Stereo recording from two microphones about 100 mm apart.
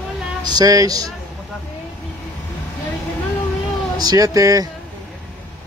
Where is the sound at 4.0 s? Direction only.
40° right (ahead or behind).